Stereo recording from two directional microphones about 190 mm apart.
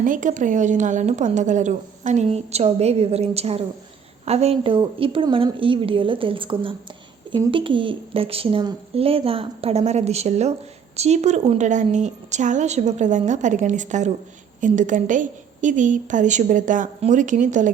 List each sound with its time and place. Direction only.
0.0 s a woman's voice: 45° right (ahead or behind)